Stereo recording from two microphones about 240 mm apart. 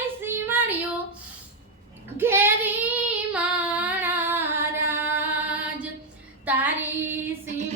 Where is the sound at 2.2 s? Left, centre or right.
Centre.